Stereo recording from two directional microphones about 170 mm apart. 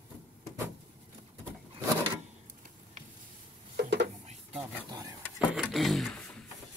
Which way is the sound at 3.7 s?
80° right.